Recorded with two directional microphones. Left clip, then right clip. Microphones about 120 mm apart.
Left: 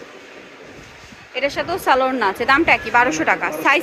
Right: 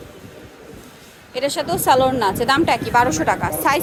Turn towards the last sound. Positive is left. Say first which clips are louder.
# left 2 dB
turn(degrees=-25)  # may be behind; listen again after turning